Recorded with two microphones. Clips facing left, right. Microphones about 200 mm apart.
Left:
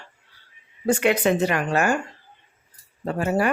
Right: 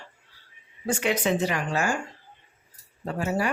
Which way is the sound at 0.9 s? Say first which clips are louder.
Left 5 dB; 60° left (ahead or behind).